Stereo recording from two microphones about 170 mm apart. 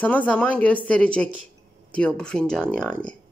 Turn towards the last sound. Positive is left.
turn(degrees=5)  # may be behind; listen again after turning